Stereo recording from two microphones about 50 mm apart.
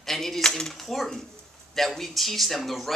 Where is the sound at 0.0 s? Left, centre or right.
Centre.